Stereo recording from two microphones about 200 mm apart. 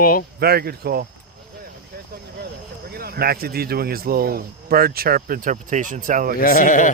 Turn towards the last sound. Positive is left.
turn(degrees=40)  # may be behind; listen again after turning